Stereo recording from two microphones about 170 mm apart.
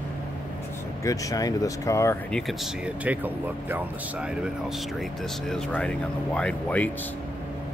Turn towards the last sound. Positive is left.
turn(degrees=10)  # may be behind; listen again after turning